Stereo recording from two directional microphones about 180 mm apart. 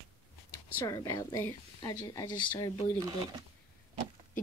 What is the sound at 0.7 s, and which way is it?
Speech, 15° left (ahead or behind).